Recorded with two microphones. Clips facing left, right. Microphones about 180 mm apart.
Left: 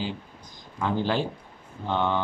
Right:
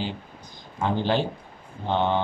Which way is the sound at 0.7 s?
25° right (ahead or behind).